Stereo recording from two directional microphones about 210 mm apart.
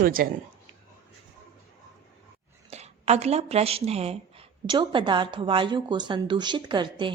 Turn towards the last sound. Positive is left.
turn(degrees=-20)  # may be behind; listen again after turning